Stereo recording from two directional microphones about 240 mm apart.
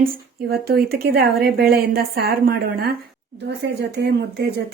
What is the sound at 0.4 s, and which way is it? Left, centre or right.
A woman's voice, right.